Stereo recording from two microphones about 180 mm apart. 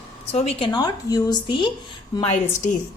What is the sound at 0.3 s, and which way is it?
Speech, 35° left (ahead or behind).